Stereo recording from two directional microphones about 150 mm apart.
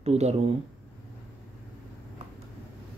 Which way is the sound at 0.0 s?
45° right (ahead or behind).